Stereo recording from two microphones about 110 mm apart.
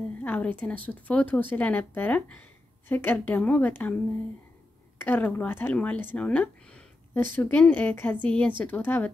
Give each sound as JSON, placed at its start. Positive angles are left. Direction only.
{"t": 0.2, "sound": "speech", "side_deg": 15}
{"t": 4.9, "sound": "speech", "side_deg": 20}